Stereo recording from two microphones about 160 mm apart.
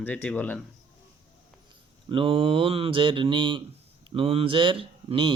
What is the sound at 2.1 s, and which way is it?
Speech, 35° right (ahead or behind).